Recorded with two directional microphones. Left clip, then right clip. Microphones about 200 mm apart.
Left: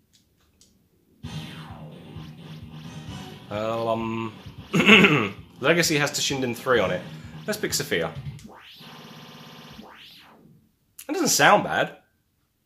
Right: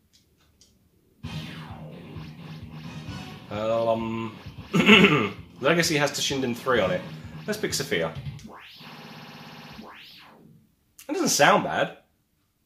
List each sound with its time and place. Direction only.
3.4 s speech: 40° left (ahead or behind)
11.1 s speech: 40° left (ahead or behind)